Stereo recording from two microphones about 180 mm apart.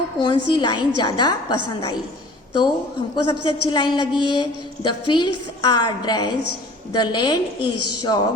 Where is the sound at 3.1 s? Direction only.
25° left (ahead or behind).